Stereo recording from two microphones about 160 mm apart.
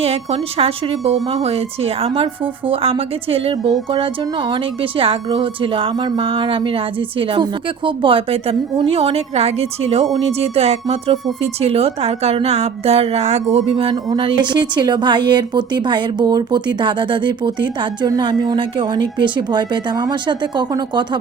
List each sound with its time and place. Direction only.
0.0 s a woman's voice: 40° right (ahead or behind)
13.9 s speech: 30° right (ahead or behind)